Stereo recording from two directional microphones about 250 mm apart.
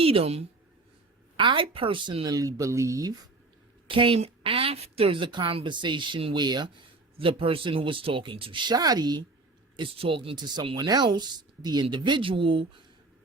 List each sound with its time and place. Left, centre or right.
0.0 s a woman's voice: right